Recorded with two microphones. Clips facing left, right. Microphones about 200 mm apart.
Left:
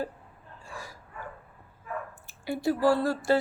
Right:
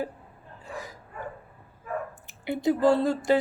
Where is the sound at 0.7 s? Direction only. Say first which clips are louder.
Right 5 dB; 20° right (ahead or behind).